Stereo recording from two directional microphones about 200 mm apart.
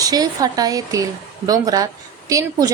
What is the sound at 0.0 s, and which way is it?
A woman's voice, 20° right (ahead or behind).